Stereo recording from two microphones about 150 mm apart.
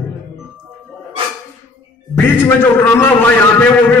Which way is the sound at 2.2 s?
15° left (ahead or behind).